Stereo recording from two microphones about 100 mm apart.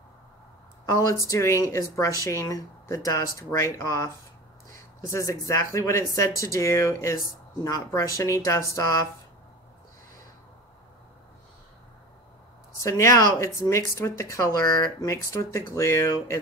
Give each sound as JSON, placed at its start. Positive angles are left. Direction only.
{"t": 0.8, "sound": "speech", "side_deg": 35}
{"t": 12.8, "sound": "speech", "side_deg": 30}